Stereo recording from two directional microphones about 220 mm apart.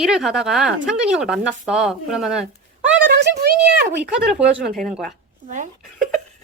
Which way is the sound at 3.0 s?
45° right (ahead or behind).